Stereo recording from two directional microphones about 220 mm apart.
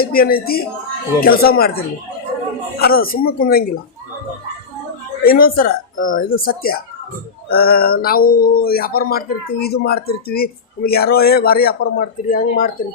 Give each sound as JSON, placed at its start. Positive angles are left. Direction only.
{"t": 0.0, "sound": "speech", "side_deg": 45}
{"t": 5.2, "sound": "speech", "side_deg": 40}